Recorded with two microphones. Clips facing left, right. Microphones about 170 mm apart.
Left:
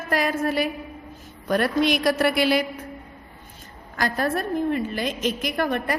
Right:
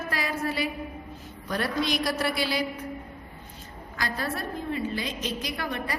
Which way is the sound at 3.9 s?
50° left (ahead or behind).